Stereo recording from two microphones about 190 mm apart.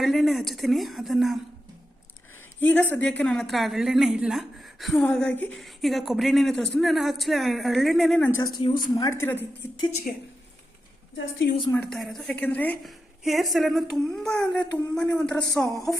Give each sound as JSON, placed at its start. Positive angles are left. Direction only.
{"t": 0.0, "sound": "a woman's voice", "side_deg": 0}
{"t": 2.6, "sound": "a woman's voice", "side_deg": 10}
{"t": 8.3, "sound": "a woman's voice", "side_deg": 15}
{"t": 10.1, "sound": "a woman's voice", "side_deg": 50}
{"t": 11.7, "sound": "a woman's voice", "side_deg": 5}